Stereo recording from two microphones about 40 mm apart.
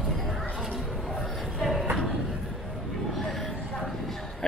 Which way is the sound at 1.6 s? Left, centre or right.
Centre.